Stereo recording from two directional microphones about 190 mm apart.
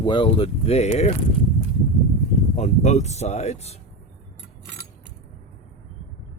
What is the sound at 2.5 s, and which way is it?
Speech, 35° left (ahead or behind).